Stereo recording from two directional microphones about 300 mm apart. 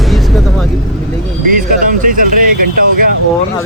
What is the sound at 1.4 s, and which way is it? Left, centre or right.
Speech, right.